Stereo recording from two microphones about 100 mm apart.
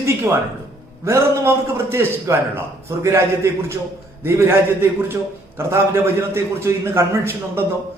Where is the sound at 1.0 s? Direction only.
25° right (ahead or behind).